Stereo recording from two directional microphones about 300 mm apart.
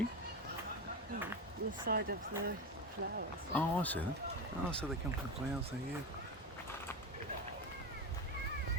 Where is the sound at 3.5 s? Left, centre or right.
Centre.